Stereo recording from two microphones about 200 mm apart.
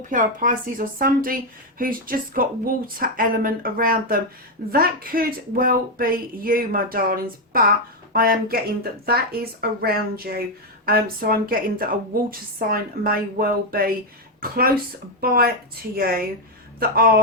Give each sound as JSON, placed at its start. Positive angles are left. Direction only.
{"t": 0.1, "sound": "a woman's voice", "side_deg": -40}